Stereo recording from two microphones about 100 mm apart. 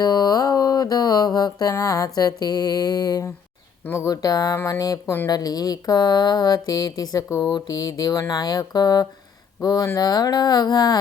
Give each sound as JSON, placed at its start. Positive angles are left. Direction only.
{"t": 0.0, "sound": "mantra", "side_deg": 40}
{"t": 1.7, "sound": "speech", "side_deg": 35}